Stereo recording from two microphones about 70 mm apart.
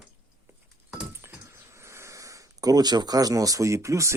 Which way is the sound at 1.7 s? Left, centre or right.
Right.